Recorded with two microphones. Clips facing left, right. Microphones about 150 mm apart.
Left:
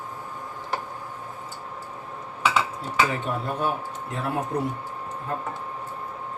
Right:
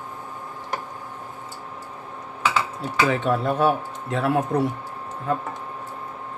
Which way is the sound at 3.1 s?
90° right.